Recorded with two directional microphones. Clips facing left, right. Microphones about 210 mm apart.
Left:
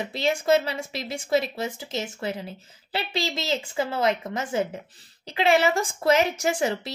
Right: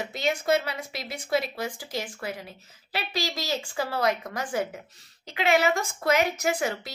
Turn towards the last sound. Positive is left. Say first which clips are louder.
# left 3 dB
turn(degrees=30)  # may be behind; listen again after turning